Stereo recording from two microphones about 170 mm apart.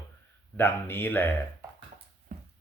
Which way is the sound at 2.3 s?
55° right (ahead or behind).